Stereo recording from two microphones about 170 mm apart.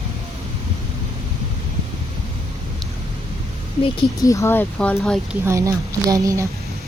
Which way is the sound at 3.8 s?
25° left (ahead or behind).